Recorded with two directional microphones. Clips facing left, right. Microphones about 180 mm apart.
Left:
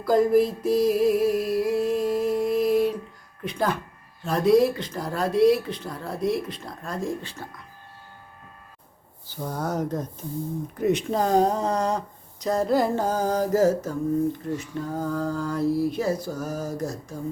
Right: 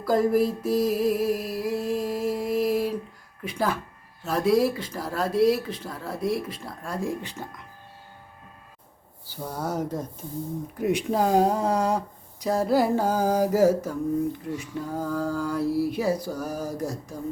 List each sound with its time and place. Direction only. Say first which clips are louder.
0.0 s a sound: left 2 dB; 5° right (ahead or behind)
3.4 s speech: left 1 dB; 5° right (ahead or behind)
9.2 s speech: left 2 dB; 10° right (ahead or behind)